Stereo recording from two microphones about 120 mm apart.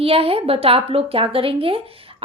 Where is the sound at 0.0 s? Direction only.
55° right (ahead or behind).